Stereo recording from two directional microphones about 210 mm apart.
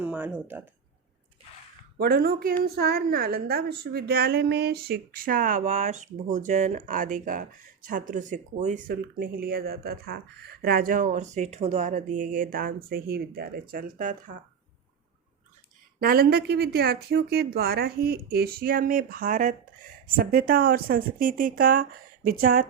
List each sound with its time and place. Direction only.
0.0 s speech: 5° right (ahead or behind)
2.0 s a woman's voice: 45° right (ahead or behind)
16.0 s a woman's voice: 45° right (ahead or behind)